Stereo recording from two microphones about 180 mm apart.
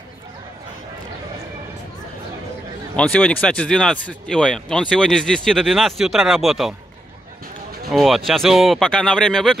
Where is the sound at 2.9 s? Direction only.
5° left (ahead or behind).